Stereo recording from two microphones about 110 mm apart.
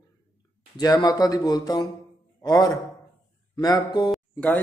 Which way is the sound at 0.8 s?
35° left (ahead or behind).